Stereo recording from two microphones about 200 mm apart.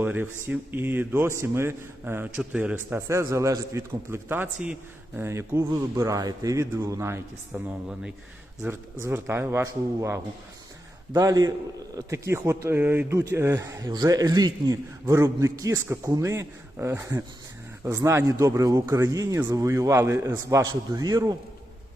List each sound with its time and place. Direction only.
0.0 s speech: 10° right (ahead or behind)
8.6 s a man's voice: 10° right (ahead or behind)